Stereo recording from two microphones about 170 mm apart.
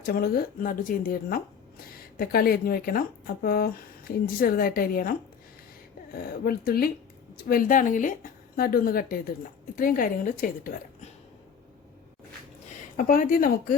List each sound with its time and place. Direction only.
0.0 s speech: 60° left (ahead or behind)
6.4 s a woman's voice: 65° left (ahead or behind)
13.0 s speech: 55° left (ahead or behind)